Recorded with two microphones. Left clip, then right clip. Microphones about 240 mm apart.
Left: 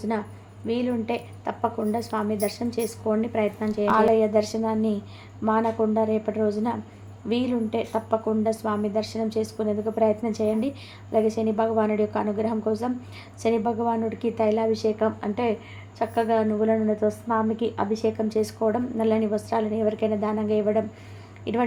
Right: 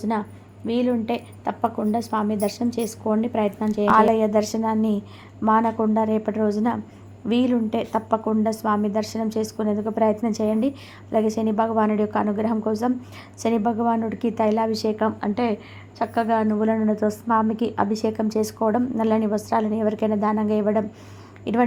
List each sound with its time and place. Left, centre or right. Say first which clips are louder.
0.7 s a woman's voice: right 3 dB; right